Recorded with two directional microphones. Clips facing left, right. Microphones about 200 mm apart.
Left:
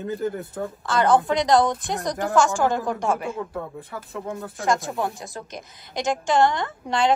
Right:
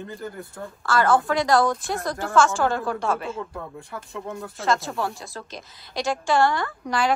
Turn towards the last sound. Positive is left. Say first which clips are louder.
# left 2 dB
turn(degrees=25)  # may be behind; listen again after turning